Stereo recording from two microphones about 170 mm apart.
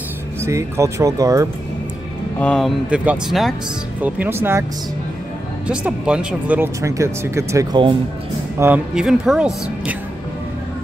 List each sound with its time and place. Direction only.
0.4 s speech: 15° right (ahead or behind)
2.3 s speech: 5° left (ahead or behind); by 4.6 s 15° right (ahead or behind)
5.7 s speech: 5° right (ahead or behind)